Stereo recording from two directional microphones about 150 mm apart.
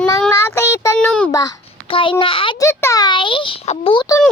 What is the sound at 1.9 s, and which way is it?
Speech, 35° left (ahead or behind).